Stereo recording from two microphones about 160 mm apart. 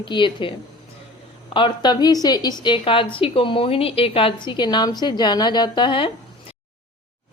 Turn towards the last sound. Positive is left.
turn(degrees=30)  # may be behind; listen again after turning